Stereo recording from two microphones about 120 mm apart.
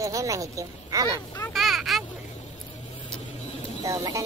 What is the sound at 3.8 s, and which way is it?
Speech, 30° right (ahead or behind).